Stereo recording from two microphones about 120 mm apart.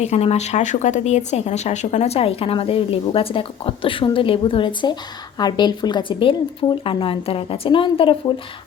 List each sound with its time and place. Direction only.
0.0 s speech: 60° left (ahead or behind); by 8.1 s 45° left (ahead or behind)